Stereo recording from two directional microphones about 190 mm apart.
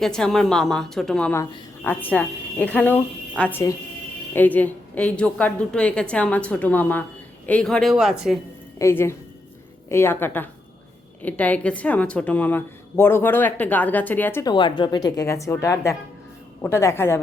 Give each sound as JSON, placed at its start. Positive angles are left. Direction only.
{"t": 0.0, "sound": "a woman's voice", "side_deg": 5}
{"t": 8.8, "sound": "a woman's voice", "side_deg": 15}
{"t": 14.5, "sound": "a woman's voice", "side_deg": 25}